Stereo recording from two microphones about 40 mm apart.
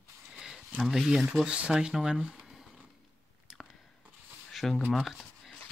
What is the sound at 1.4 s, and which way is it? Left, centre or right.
Speech, right.